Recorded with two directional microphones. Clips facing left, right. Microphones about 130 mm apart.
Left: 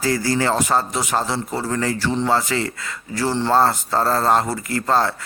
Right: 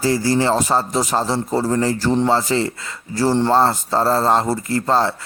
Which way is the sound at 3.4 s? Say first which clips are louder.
Right 1 dB; 25° right (ahead or behind).